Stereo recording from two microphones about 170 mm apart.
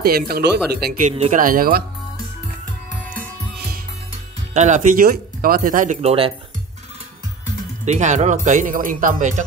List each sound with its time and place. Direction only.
0.0 s speech: 65° right (ahead or behind)
4.6 s speech: 45° right (ahead or behind)
7.8 s speech: 45° right (ahead or behind)